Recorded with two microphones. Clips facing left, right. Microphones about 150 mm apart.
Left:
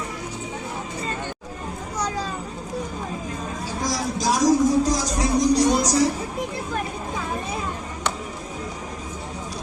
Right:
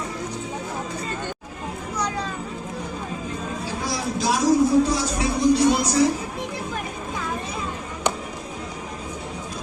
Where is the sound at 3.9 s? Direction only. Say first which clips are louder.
Left 1 dB; 40° left (ahead or behind).